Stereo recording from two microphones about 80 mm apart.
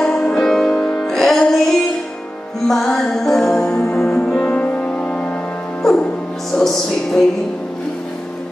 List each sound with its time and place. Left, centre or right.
0.0 s music: centre